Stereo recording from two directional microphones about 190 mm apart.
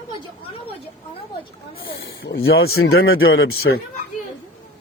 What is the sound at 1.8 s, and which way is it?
Speech, 85° left.